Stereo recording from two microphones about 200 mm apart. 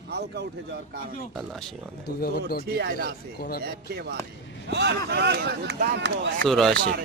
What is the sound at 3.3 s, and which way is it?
Speech, 50° left (ahead or behind).